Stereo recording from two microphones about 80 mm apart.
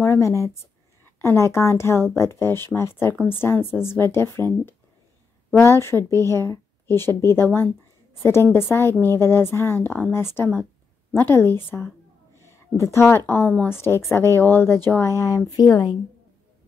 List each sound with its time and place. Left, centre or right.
0.0 s a woman's voice: left
5.6 s a woman's voice: left